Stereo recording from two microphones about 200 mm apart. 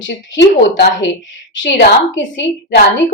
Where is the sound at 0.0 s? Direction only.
65° left (ahead or behind).